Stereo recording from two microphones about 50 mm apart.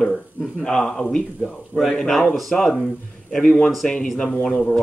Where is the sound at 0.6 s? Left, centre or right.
Centre.